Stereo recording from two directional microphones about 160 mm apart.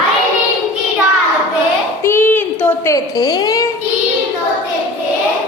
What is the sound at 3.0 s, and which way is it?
Speech, 25° left (ahead or behind).